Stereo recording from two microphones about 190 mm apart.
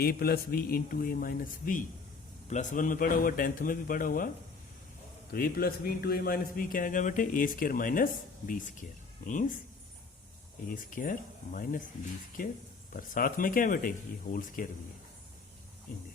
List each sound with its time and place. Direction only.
0.0 s speech: 50° left (ahead or behind)
5.3 s speech: 50° left (ahead or behind)
10.7 s speech: 45° left (ahead or behind)